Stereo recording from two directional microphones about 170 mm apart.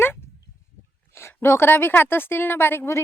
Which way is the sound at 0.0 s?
15° left (ahead or behind).